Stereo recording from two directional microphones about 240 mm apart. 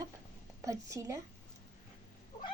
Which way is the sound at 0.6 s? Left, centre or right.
Centre.